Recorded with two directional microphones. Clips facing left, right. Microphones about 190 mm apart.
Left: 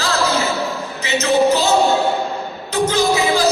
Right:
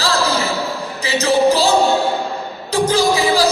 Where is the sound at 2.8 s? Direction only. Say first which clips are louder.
Right 1 dB; 35° right (ahead or behind).